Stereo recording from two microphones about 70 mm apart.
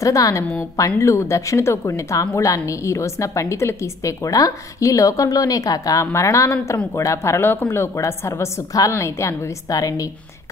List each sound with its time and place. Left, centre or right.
0.0 s a woman's voice: left